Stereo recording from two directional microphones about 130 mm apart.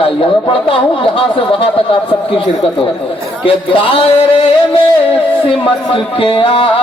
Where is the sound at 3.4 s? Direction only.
40° left (ahead or behind).